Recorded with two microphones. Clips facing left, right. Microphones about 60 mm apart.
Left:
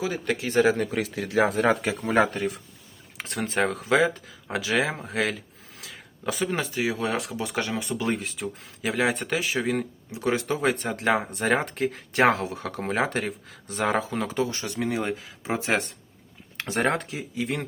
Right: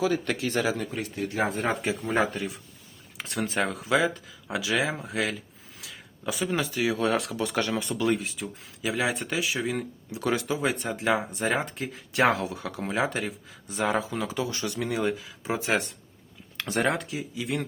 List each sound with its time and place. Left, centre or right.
0.0 s speech: centre
0.8 s speech: left
2.1 s speech: left
3.2 s speech: left
5.8 s a sound: left
6.6 s speech: left
8.2 s speech: left
10.1 s speech: left
10.4 s speech: left